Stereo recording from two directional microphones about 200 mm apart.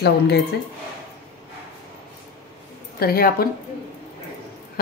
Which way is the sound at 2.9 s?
50° left (ahead or behind).